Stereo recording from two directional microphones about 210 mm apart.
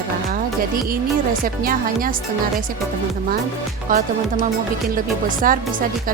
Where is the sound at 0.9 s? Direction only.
40° right (ahead or behind).